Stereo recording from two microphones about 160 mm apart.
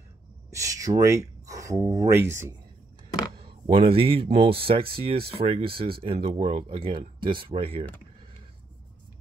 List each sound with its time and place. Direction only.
0.5 s speech: 20° right (ahead or behind)
3.3 s speech: 30° right (ahead or behind)